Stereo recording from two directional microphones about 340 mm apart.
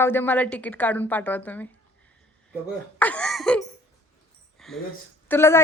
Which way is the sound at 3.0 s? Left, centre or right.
Centre.